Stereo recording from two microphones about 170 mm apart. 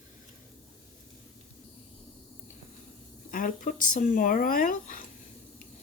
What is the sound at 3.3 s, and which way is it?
Speech, 50° left (ahead or behind).